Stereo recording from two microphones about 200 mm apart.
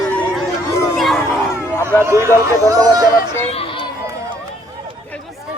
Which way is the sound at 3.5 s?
30° left (ahead or behind).